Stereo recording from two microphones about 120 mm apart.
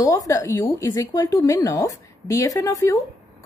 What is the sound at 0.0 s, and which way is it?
A woman's voice, 25° left (ahead or behind).